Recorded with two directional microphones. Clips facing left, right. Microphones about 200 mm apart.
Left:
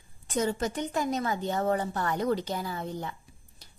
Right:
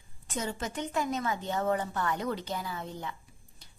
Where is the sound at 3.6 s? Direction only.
40° left (ahead or behind).